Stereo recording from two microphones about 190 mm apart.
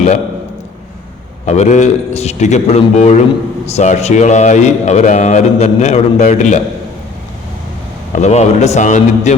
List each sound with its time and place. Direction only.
1.5 s speech: 35° left (ahead or behind)
8.1 s speech: 35° left (ahead or behind)